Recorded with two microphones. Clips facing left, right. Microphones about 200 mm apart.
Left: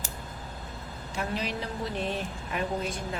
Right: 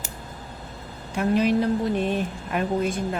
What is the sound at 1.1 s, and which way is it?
Speech, 55° right (ahead or behind).